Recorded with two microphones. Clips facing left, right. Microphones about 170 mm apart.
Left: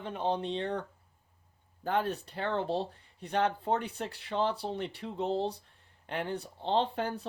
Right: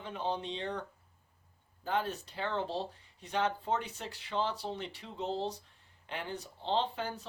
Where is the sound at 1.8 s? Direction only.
55° left (ahead or behind).